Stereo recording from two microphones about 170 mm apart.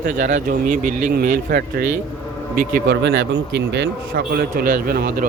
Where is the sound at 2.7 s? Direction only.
85° right.